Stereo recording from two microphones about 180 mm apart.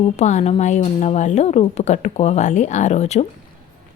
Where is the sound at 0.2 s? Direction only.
40° left (ahead or behind).